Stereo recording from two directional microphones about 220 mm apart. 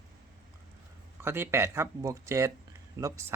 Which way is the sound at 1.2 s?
10° right (ahead or behind).